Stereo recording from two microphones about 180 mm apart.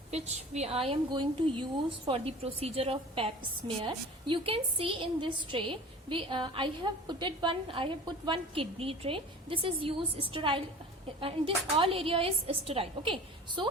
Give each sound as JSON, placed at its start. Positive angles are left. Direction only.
{"t": 0.1, "sound": "a woman's voice", "side_deg": -35}